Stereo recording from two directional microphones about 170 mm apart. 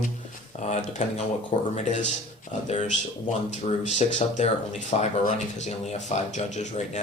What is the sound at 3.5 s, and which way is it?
Speech, 40° left (ahead or behind).